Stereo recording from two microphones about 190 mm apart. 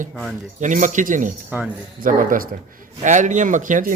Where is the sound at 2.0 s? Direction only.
45° right (ahead or behind).